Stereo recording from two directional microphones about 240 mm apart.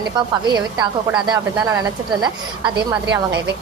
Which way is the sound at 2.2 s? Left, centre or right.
Centre.